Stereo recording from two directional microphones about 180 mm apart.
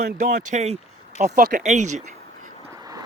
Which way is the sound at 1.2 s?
50° right (ahead or behind).